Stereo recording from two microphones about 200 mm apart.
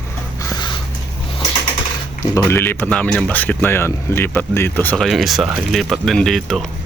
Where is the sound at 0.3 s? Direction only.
20° left (ahead or behind).